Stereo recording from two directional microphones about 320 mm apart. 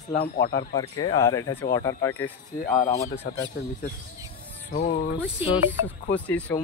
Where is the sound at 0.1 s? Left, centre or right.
Left.